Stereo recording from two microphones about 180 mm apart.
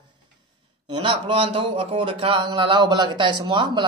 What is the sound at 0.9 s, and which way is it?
Speech, 30° right (ahead or behind).